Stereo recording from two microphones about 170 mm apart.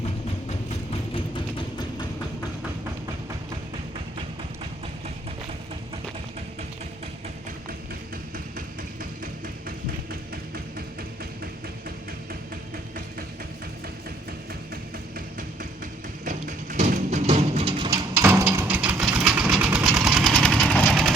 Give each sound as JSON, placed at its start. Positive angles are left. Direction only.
{"t": 9.6, "sound": "music", "side_deg": -60}
{"t": 16.2, "sound": "music", "side_deg": -50}
{"t": 18.2, "sound": "engine", "side_deg": -15}